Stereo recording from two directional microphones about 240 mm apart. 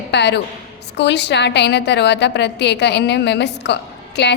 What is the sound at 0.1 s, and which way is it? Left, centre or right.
A woman's voice, left.